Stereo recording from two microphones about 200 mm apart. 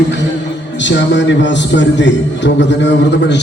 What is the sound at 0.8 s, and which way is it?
A man's voice, 65° left (ahead or behind).